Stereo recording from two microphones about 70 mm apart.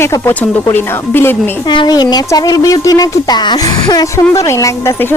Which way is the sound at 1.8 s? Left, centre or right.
Left.